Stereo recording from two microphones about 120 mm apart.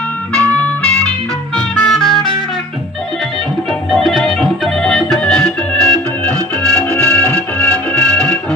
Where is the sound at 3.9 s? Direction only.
Centre (ahead or behind).